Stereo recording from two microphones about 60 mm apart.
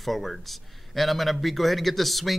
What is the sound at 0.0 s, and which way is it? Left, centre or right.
A man's voice, centre.